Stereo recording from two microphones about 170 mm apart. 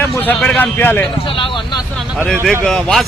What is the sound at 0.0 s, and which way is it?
Speech, 10° left (ahead or behind).